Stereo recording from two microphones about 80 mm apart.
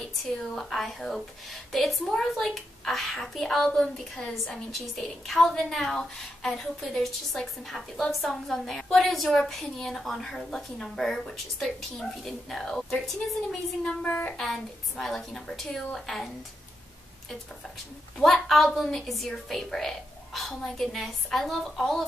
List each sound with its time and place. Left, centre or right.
0.6 s speech: centre
13.8 s a sound: centre
14.4 s speech: centre
18.2 s speech: centre